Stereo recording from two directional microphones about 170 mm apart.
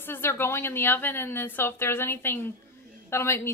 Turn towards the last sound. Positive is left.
turn(degrees=15)  # may be behind; listen again after turning